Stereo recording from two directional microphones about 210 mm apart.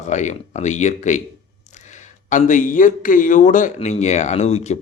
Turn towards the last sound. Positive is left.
turn(degrees=30)  # may be behind; listen again after turning